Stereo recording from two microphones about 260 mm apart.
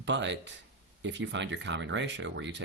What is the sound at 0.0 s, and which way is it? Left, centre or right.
Speech, right.